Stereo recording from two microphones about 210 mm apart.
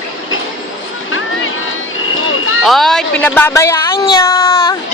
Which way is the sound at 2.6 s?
Centre (ahead or behind).